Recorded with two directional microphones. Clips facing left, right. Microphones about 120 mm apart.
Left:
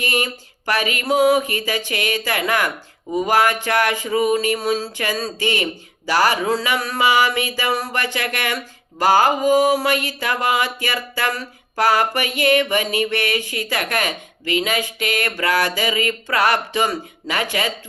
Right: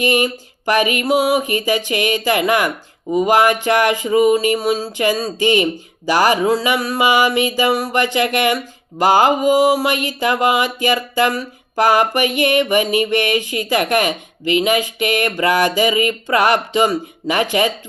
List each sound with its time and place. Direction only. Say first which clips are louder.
0.0 s speech: right 7 dB; 15° right (ahead or behind)